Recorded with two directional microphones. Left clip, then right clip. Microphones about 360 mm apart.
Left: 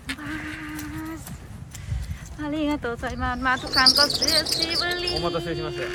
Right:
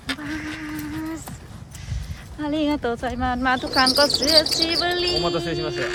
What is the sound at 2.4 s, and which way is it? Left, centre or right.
Speech, centre.